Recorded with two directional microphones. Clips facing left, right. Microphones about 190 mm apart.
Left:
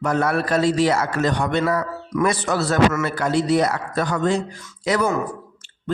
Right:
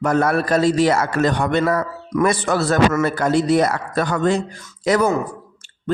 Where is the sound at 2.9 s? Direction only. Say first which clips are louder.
Right 4 dB; 40° right (ahead or behind).